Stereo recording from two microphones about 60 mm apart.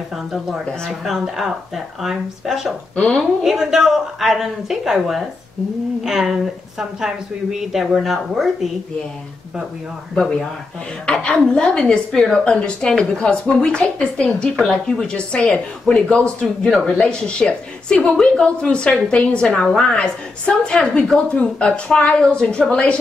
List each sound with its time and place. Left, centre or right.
0.1 s speech: centre
3.0 s speech: centre
3.4 s speech: centre
11.1 s speech: centre